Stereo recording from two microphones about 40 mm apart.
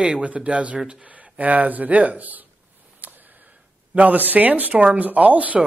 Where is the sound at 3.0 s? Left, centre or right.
Right.